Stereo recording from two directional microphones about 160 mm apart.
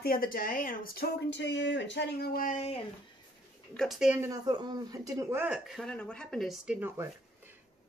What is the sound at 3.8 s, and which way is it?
Speech, 5° right (ahead or behind).